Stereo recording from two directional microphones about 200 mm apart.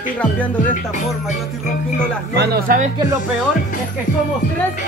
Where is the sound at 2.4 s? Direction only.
50° right (ahead or behind).